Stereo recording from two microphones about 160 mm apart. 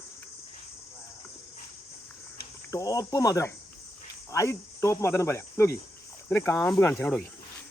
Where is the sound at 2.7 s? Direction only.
20° left (ahead or behind).